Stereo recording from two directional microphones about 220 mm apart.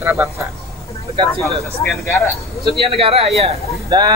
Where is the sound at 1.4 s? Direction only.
5° left (ahead or behind).